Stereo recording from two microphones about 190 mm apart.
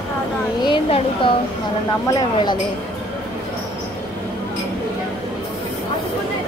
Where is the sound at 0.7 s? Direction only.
30° left (ahead or behind).